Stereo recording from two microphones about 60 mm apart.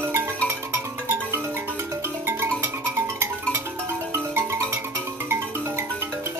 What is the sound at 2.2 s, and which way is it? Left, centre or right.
Music, right.